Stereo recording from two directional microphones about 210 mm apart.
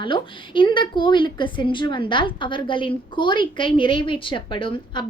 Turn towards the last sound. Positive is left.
turn(degrees=25)  # may be behind; listen again after turning